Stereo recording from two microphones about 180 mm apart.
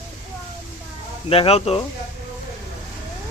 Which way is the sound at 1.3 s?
30° left (ahead or behind).